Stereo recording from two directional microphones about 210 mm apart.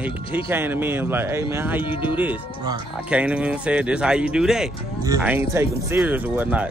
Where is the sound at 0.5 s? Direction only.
10° right (ahead or behind).